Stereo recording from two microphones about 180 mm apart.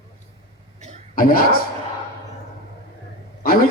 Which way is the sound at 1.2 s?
50° left (ahead or behind).